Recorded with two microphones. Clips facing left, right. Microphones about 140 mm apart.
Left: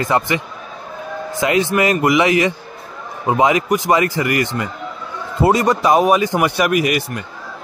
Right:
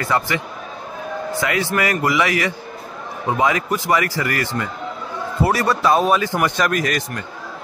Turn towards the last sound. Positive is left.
turn(degrees=10)  # may be behind; listen again after turning